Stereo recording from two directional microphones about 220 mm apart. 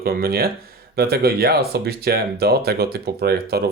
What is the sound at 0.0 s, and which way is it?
Speech, 45° right (ahead or behind).